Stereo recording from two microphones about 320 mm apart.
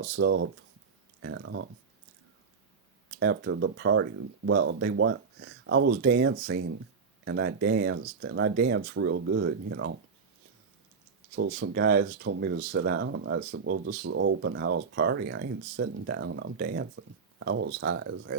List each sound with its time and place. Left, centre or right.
0.0 s speech: right
3.2 s speech: right
11.3 s speech: right